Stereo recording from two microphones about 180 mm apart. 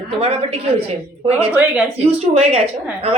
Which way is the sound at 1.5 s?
10° right (ahead or behind).